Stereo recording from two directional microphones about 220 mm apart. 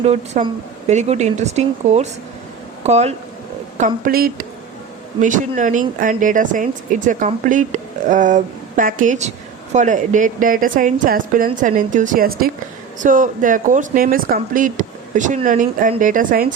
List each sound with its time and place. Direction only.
0.0 s speech: 30° right (ahead or behind)